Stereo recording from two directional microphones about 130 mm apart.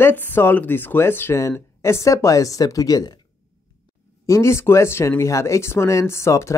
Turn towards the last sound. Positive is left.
turn(degrees=20)  # may be behind; listen again after turning